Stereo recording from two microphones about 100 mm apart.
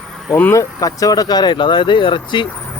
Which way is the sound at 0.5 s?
35° left (ahead or behind).